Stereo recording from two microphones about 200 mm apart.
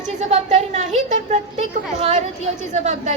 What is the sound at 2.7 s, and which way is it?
Speech, 35° right (ahead or behind).